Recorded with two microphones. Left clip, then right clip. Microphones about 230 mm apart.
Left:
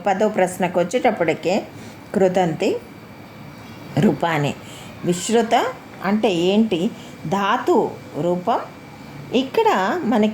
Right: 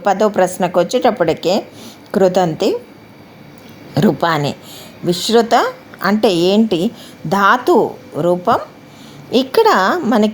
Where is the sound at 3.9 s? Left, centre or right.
Right.